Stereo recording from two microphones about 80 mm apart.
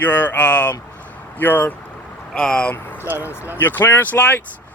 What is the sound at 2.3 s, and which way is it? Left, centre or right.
Speech, centre.